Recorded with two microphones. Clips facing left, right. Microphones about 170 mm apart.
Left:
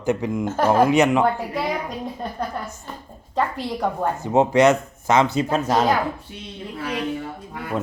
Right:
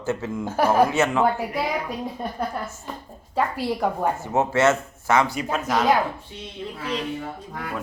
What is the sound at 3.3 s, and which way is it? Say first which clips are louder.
Speech: even; 5° right (ahead or behind).